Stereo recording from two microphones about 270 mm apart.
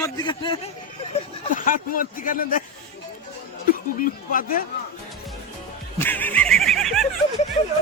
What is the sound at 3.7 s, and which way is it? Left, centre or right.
Speech, left.